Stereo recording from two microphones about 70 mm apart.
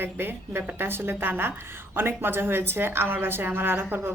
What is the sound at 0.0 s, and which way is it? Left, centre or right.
A woman's voice, right.